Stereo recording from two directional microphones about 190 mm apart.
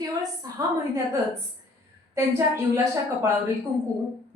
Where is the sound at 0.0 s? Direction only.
20° right (ahead or behind).